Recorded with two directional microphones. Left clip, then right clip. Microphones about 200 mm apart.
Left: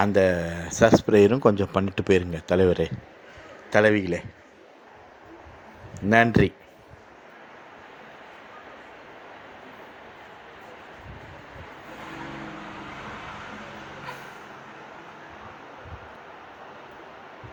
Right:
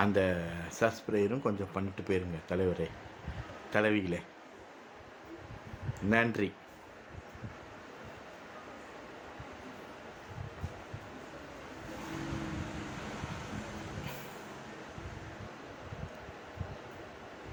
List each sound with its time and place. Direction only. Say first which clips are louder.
0.0 s a man's voice: left 9 dB; 30° left (ahead or behind)
6.1 s speech: left 11 dB; 35° left (ahead or behind)